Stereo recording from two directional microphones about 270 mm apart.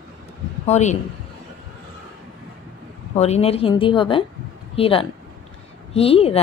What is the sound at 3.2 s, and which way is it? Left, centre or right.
A woman's voice, left.